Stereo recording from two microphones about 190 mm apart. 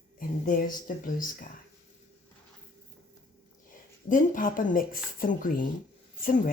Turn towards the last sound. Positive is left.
turn(degrees=45)  # may be behind; listen again after turning